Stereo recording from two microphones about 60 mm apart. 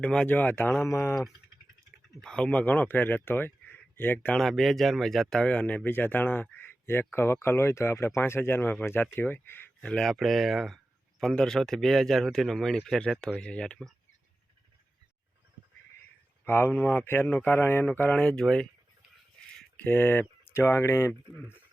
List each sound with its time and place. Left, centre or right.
0.0 s speech: centre
0.3 s speech: left
2.2 s speech: centre; by 4.3 s left
4.4 s speech: centre
5.4 s speech: centre
5.9 s speech: left
9.8 s speech: centre
10.2 s speech: centre
11.2 s speech: centre
16.5 s speech: left
18.2 s speech: centre
19.7 s speech: left